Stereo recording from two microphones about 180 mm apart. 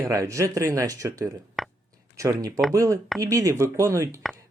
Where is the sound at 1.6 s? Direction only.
Centre (ahead or behind).